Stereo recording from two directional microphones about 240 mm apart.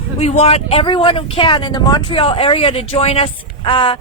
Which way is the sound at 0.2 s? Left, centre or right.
Left.